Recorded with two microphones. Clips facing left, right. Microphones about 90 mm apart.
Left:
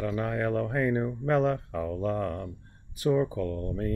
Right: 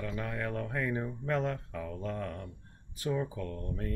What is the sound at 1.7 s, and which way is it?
Speech, 35° left (ahead or behind).